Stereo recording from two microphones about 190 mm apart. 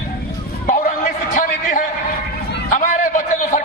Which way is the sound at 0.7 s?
45° left (ahead or behind).